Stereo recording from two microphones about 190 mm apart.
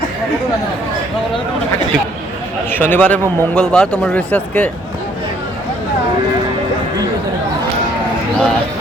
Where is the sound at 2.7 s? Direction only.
10° left (ahead or behind).